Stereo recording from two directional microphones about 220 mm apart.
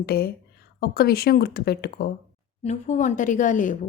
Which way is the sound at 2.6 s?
35° left (ahead or behind).